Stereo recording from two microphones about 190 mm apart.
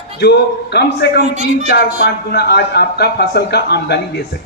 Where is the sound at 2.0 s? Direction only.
55° left (ahead or behind).